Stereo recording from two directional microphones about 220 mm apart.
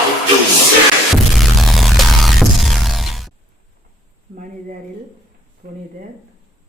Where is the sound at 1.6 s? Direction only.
Centre (ahead or behind).